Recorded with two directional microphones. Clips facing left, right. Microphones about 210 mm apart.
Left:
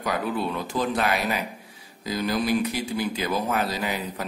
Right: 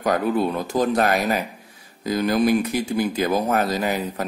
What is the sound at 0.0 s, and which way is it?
Speech, 45° right (ahead or behind).